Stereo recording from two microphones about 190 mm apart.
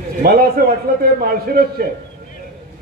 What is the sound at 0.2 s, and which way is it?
A man's voice, 50° right (ahead or behind).